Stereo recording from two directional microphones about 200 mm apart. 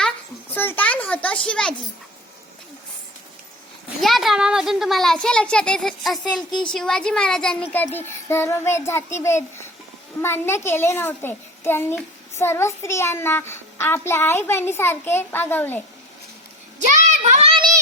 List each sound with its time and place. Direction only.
0.5 s a child's voice: 10° left (ahead or behind)
4.0 s a child's voice: centre (ahead or behind)
16.8 s child singing: 35° right (ahead or behind)